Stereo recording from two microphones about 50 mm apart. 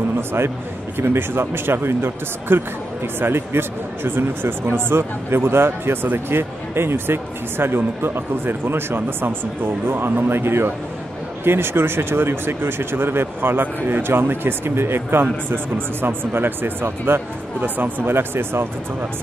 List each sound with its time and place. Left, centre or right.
0.9 s a man's voice: right
17.6 s a man's voice: right